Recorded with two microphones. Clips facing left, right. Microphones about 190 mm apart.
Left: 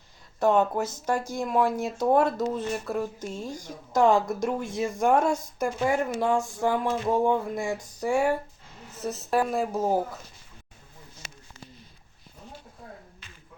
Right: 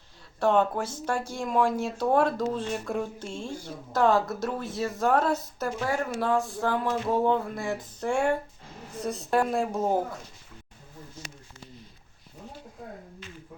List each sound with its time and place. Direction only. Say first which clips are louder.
0.3 s speech: left 1 dB; 10° left (ahead or behind)
3.4 s speech: even; 40° left (ahead or behind)
3.9 s speech: left 2 dB; 15° left (ahead or behind)